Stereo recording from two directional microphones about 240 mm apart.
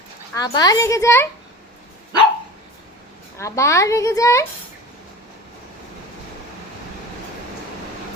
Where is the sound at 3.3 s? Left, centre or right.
Centre.